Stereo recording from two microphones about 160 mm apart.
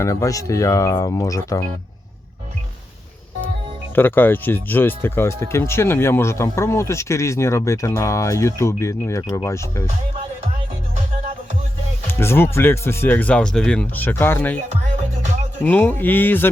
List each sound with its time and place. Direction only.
0.0 s speech: 20° left (ahead or behind)
3.9 s speech: 10° left (ahead or behind)
12.0 s speech: 15° left (ahead or behind)
15.6 s speech: 10° left (ahead or behind)